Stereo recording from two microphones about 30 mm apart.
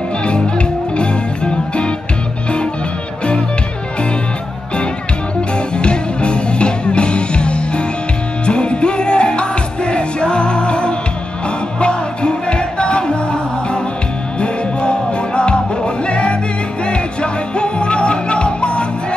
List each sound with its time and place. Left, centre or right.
0.2 s music: left
5.8 s music: left